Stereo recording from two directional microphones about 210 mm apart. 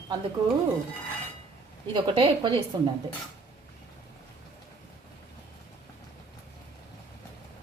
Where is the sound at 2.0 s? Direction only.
25° right (ahead or behind).